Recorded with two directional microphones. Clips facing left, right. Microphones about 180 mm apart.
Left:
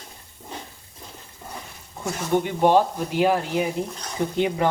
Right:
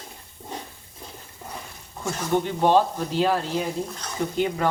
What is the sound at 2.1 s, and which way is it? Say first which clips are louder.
Speech: left 1 dB; 10° left (ahead or behind).